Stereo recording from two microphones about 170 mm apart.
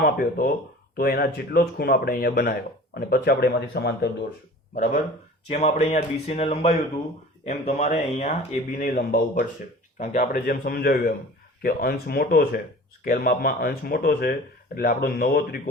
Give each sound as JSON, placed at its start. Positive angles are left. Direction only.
{"t": 0.0, "sound": "speech", "side_deg": 60}
{"t": 5.5, "sound": "speech", "side_deg": 40}